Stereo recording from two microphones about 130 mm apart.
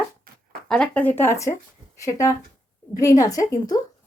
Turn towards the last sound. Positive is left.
turn(degrees=30)  # may be behind; listen again after turning